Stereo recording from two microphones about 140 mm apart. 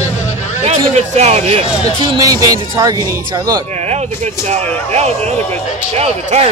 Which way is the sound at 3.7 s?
50° right (ahead or behind).